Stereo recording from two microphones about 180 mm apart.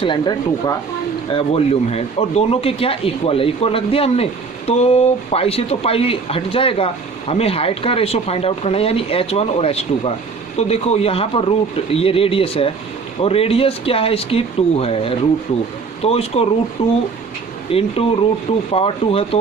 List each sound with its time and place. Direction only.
0.0 s speech: 25° left (ahead or behind)